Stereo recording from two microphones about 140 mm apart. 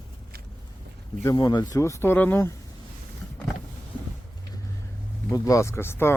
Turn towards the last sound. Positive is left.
turn(degrees=15)  # may be behind; listen again after turning